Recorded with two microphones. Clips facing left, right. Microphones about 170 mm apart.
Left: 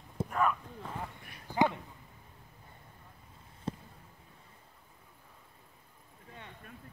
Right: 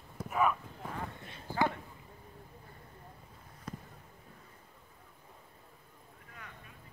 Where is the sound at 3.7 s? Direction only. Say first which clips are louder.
Left 6 dB; 30° left (ahead or behind).